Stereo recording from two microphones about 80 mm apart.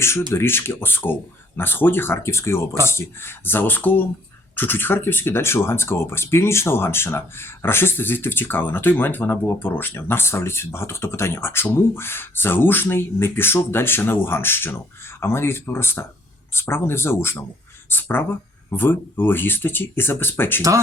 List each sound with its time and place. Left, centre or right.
0.3 s speech: left
20.6 s speech: right